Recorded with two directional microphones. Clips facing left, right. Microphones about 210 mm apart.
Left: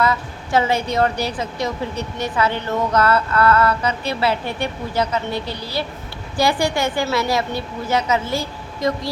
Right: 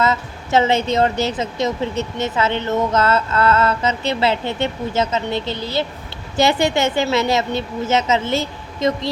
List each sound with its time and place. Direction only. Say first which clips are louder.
0.0 s a woman's voice: right 1 dB; 25° right (ahead or behind)